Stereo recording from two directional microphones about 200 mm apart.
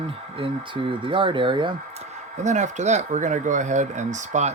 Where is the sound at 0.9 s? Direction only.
25° right (ahead or behind).